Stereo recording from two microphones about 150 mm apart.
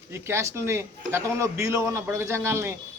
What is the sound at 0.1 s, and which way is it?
A man's voice, 15° right (ahead or behind).